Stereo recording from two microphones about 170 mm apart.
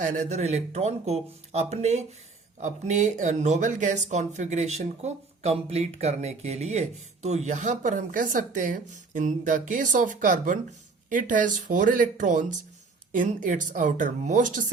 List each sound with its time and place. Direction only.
0.0 s speech: 45° right (ahead or behind)